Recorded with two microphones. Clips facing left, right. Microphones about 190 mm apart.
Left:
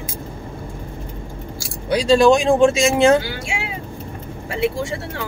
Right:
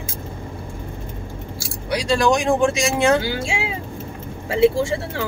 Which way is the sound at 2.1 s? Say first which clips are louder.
Left 5 dB; 25° left (ahead or behind).